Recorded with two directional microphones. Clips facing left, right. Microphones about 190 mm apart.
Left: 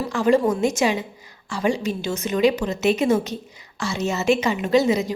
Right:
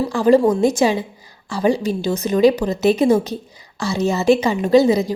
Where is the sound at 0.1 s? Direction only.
35° right (ahead or behind).